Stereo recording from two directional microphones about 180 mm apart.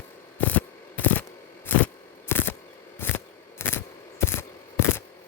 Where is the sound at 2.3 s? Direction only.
10° left (ahead or behind).